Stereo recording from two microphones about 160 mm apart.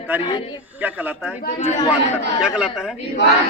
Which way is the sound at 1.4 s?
55° left (ahead or behind).